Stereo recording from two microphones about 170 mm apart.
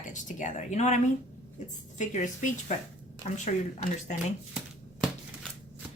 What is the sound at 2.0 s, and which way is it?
Speech, 45° left (ahead or behind).